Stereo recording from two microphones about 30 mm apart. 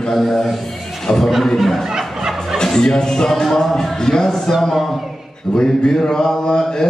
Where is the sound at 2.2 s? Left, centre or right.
Centre.